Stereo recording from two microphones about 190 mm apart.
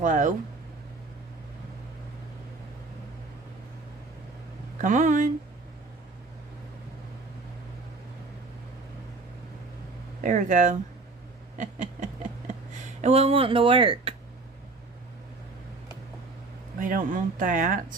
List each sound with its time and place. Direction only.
0.0 s speech: 40° right (ahead or behind)
4.8 s speech: 45° right (ahead or behind)
10.2 s speech: 40° right (ahead or behind)
11.5 s a sound: 40° right (ahead or behind)
12.8 s speech: 35° right (ahead or behind)
16.8 s speech: 45° right (ahead or behind)